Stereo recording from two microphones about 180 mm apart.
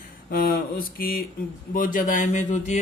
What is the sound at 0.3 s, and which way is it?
Mantra, 55° left (ahead or behind).